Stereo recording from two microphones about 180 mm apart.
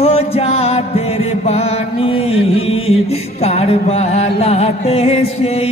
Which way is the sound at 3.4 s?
35° left (ahead or behind).